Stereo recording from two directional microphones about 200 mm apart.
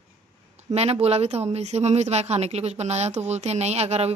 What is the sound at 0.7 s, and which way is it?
A woman's voice, 35° right (ahead or behind).